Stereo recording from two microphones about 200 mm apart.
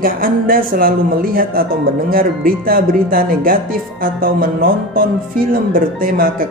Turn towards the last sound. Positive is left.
turn(degrees=-45)  # may be behind; listen again after turning